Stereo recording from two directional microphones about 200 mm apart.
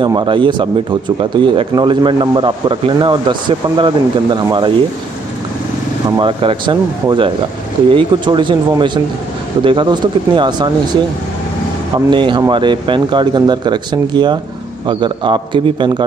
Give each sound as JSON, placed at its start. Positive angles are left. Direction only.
{"t": 0.0, "sound": "speech", "side_deg": -20}
{"t": 6.1, "sound": "speech", "side_deg": -25}
{"t": 12.1, "sound": "speech", "side_deg": -25}